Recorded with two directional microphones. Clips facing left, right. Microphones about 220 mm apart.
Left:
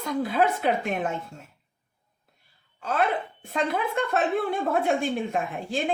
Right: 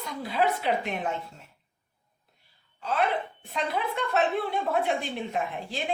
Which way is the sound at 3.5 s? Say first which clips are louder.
Left 4 dB; 50° left (ahead or behind).